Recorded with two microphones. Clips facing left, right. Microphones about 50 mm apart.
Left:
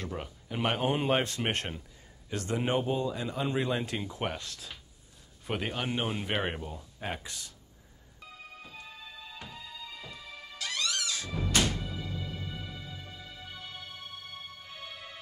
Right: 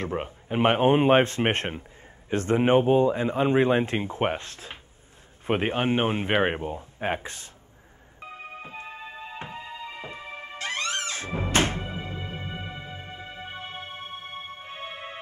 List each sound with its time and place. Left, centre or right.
0.0 s speech: right
8.2 s music: right